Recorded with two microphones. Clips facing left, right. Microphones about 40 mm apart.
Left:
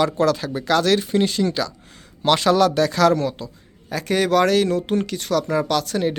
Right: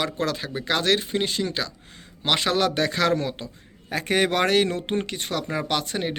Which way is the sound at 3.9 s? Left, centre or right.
Right.